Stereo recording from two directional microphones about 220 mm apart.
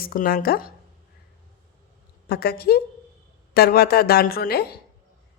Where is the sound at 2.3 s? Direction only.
45° left (ahead or behind).